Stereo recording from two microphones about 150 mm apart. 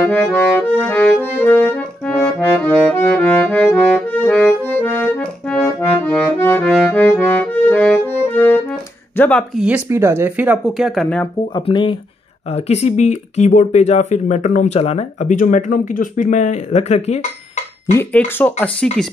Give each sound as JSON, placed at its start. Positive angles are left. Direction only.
{"t": 0.0, "sound": "accordion", "side_deg": 5}
{"t": 9.6, "sound": "speech", "side_deg": -10}
{"t": 11.5, "sound": "speech", "side_deg": 30}
{"t": 12.4, "sound": "speech", "side_deg": 45}
{"t": 17.9, "sound": "accordion", "side_deg": 10}